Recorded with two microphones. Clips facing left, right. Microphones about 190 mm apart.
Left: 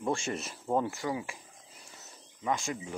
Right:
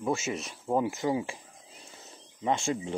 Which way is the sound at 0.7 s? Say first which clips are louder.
Right 4 dB; 15° right (ahead or behind).